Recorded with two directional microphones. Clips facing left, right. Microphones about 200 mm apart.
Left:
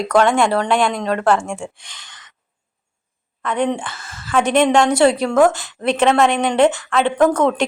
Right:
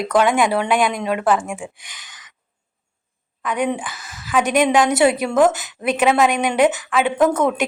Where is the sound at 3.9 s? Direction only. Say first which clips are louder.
Left 1 dB; 15° right (ahead or behind).